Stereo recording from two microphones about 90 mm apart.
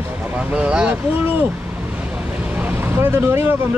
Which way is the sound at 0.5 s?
10° right (ahead or behind).